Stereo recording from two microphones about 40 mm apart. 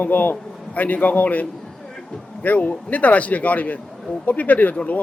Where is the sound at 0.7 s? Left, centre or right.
Left.